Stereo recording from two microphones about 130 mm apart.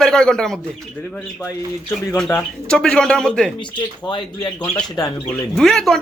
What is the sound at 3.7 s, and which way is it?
Speech, 35° left (ahead or behind).